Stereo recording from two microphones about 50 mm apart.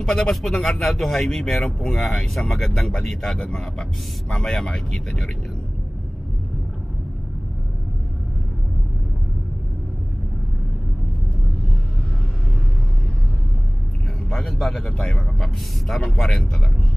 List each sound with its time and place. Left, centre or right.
0.0 s speech: centre
1.6 s speech: left
2.0 s speech: centre
3.3 s speech: centre
14.3 s a man's voice: centre
14.9 s speech: centre
15.1 s speech: centre